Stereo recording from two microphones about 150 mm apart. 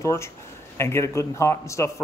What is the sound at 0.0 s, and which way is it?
A man's voice, 20° left (ahead or behind).